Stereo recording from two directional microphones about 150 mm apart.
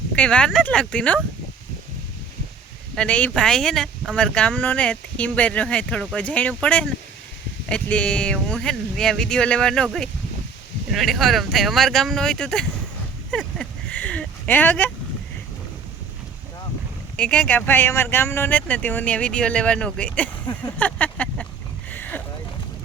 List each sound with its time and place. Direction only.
0.2 s speech: 5° left (ahead or behind)
2.9 s speech: 5° left (ahead or behind)
17.2 s speech: 10° left (ahead or behind)
21.9 s a sound: 10° left (ahead or behind)